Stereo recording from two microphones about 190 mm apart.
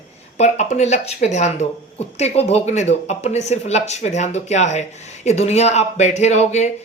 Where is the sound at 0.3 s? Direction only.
35° left (ahead or behind).